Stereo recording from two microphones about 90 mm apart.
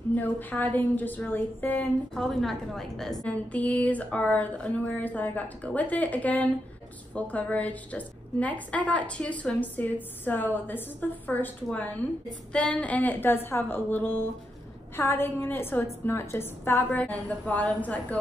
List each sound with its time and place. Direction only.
0.1 s a woman's voice: 20° left (ahead or behind)
2.1 s a woman's voice: 5° left (ahead or behind)
3.3 s a woman's voice: 15° left (ahead or behind)
17.0 s a woman's voice: 15° left (ahead or behind)